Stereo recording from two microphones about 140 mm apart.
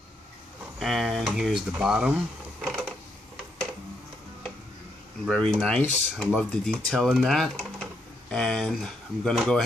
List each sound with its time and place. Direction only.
0.7 s speech: centre (ahead or behind)
2.6 s a sound: centre (ahead or behind)
5.2 s speech: centre (ahead or behind)
5.8 s speech: 15° left (ahead or behind)
6.5 s speech: 5° left (ahead or behind)